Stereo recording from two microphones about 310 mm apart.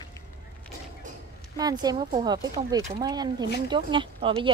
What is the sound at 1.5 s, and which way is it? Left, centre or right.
Speech, centre.